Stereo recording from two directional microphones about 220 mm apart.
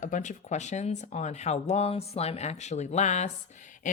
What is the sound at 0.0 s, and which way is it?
Speech, 35° left (ahead or behind).